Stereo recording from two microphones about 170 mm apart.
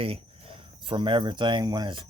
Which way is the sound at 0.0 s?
35° right (ahead or behind).